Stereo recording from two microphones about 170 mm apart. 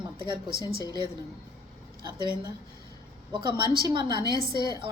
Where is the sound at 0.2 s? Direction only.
30° right (ahead or behind).